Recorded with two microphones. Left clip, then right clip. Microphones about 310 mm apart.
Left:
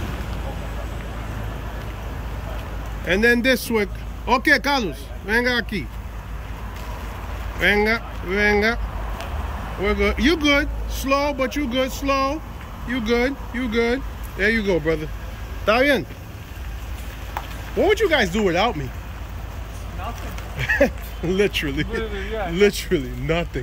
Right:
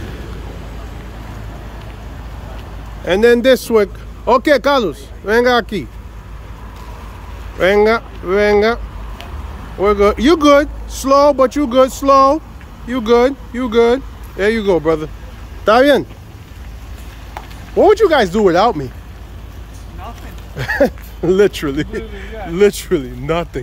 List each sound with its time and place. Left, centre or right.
3.1 s speech: centre
7.6 s speech: centre
9.8 s speech: centre
17.3 s speech: centre
20.5 s speech: centre